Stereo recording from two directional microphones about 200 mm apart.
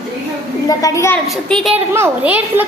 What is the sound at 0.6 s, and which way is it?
Speech, 15° left (ahead or behind).